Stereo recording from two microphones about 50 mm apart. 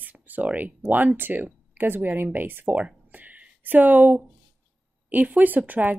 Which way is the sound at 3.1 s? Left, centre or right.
Right.